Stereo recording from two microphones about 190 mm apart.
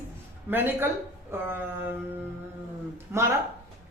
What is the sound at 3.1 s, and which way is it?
Speech, 10° right (ahead or behind).